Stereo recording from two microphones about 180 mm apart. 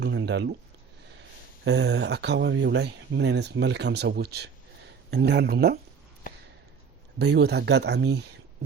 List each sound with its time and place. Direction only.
0.0 s a sound: 75° right (ahead or behind)
1.6 s speech: 70° right (ahead or behind)
7.2 s speech: 65° right (ahead or behind)